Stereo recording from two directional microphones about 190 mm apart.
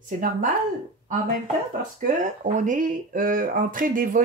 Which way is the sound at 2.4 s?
40° right (ahead or behind).